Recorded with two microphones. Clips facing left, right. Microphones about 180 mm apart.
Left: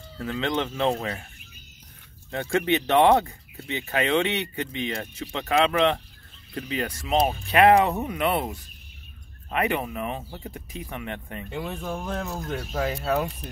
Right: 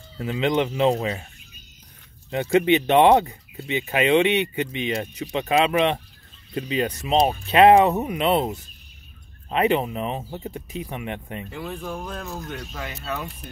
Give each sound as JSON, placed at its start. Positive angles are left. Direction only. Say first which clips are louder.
{"t": 0.2, "sound": "speech", "louder": "right 5 dB", "side_deg": -15}
{"t": 2.3, "sound": "speech", "louder": "right 5 dB", "side_deg": -20}
{"t": 11.5, "sound": "speech", "louder": "left 2 dB", "side_deg": 25}